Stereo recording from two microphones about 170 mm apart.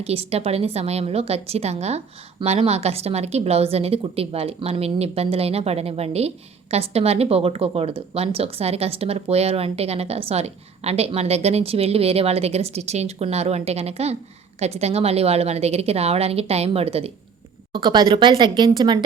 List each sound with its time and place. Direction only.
0.0 s a woman's voice: 35° right (ahead or behind)